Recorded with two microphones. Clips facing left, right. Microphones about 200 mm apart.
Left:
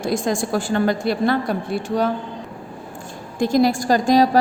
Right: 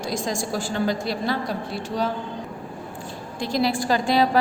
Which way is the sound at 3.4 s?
45° left (ahead or behind).